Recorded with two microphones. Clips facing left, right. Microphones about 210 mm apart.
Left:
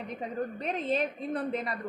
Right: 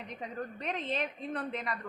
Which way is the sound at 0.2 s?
35° left (ahead or behind).